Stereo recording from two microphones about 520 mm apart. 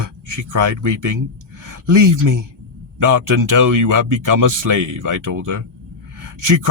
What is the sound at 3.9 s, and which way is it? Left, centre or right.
Speech, right.